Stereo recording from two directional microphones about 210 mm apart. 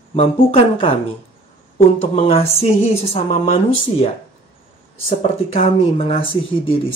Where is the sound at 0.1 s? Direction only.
30° left (ahead or behind).